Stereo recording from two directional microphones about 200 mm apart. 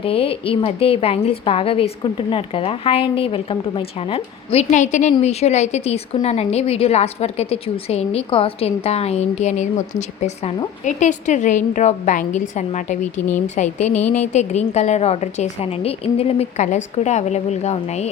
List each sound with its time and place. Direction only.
0.0 s a woman's voice: 30° left (ahead or behind)